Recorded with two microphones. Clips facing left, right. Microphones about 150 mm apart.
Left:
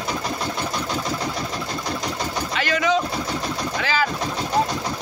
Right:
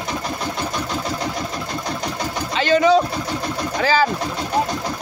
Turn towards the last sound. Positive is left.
turn(degrees=-35)  # may be behind; listen again after turning